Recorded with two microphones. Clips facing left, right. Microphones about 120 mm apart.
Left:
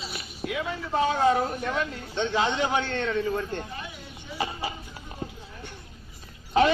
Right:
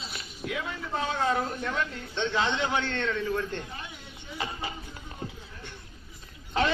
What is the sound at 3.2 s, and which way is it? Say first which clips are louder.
Speech: left 2 dB; 40° left (ahead or behind).